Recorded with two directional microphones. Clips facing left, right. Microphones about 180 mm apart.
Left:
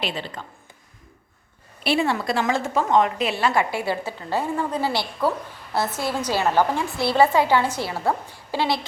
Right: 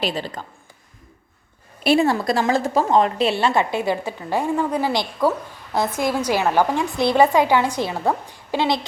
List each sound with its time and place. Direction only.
0.0 s speech: 40° right (ahead or behind)
1.8 s a woman's voice: 45° right (ahead or behind); by 8.8 s 20° right (ahead or behind)